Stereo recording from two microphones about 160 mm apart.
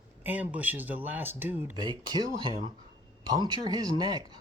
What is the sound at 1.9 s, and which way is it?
Speech, 30° right (ahead or behind).